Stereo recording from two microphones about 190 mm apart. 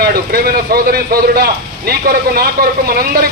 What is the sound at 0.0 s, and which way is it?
A man's voice, 55° right (ahead or behind).